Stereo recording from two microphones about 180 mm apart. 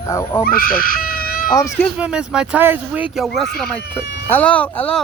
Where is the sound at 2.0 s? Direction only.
5° right (ahead or behind).